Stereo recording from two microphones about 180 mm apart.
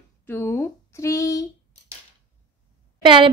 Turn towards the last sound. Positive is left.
turn(degrees=-25)  # may be behind; listen again after turning